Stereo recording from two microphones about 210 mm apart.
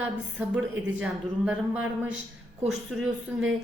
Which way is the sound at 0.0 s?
5° right (ahead or behind).